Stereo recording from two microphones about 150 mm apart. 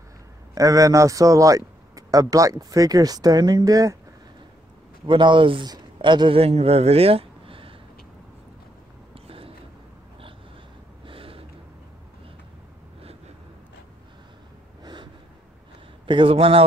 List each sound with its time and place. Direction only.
0.6 s a man's voice: 25° right (ahead or behind)
5.0 s a man's voice: 35° right (ahead or behind)
9.1 s a sound: 40° right (ahead or behind)
11.1 s a sound: 40° right (ahead or behind)
14.8 s snort: 30° right (ahead or behind)
16.1 s a man's voice: 35° right (ahead or behind)